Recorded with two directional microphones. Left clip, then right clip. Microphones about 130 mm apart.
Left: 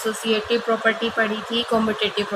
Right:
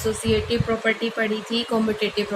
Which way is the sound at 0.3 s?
20° right (ahead or behind).